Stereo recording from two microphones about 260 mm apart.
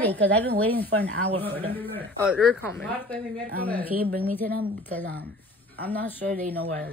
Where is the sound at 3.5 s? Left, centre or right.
Right.